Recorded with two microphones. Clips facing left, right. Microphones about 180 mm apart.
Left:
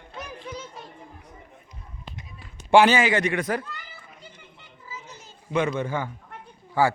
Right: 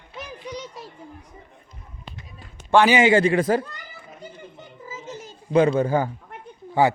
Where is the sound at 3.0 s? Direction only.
30° right (ahead or behind).